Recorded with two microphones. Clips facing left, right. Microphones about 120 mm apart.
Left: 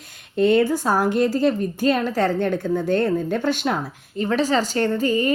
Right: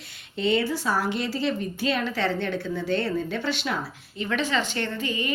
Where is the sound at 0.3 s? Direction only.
50° left (ahead or behind).